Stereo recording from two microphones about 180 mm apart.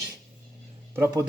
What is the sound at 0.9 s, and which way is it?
Speech, 15° right (ahead or behind).